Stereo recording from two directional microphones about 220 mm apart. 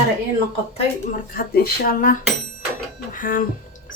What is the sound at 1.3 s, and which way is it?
Speech, 40° left (ahead or behind).